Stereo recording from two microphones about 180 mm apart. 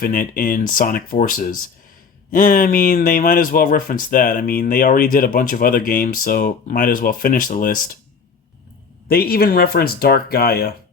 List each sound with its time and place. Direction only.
0.0 s speech: 50° left (ahead or behind)
9.0 s speech: 60° left (ahead or behind)